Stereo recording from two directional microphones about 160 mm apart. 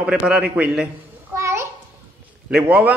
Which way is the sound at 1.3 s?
15° right (ahead or behind).